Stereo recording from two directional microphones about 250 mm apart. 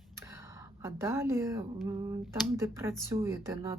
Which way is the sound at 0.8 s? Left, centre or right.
Centre.